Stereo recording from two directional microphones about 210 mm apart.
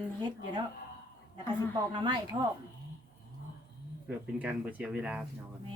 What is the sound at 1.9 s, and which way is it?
Speech, 20° right (ahead or behind).